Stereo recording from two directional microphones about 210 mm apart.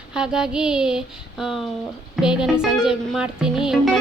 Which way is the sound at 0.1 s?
5° right (ahead or behind).